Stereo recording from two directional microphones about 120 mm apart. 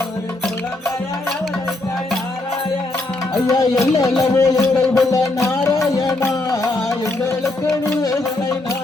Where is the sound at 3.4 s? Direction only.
30° left (ahead or behind).